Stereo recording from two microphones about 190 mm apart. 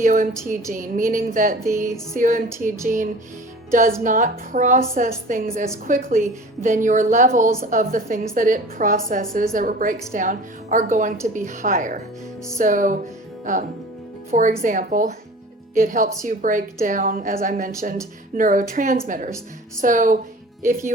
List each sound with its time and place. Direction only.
0.0 s a woman's voice: 40° right (ahead or behind)
1.6 s music: 15° right (ahead or behind)
2.1 s a woman's voice: 45° right (ahead or behind)
2.6 s music: 15° right (ahead or behind)
4.0 s a woman's voice: 45° right (ahead or behind)